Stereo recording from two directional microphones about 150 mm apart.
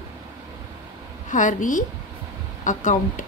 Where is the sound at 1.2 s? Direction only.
60° left (ahead or behind).